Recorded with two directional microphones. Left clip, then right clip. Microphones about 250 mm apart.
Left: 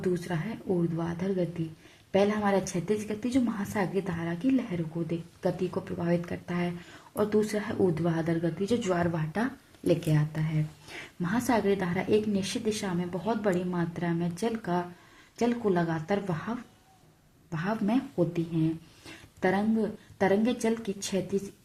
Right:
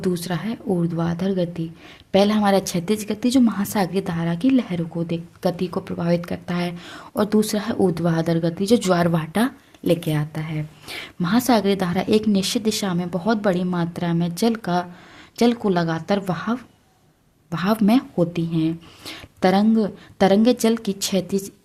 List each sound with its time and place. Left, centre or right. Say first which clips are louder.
0.0 s a woman's voice: right 6 dB; right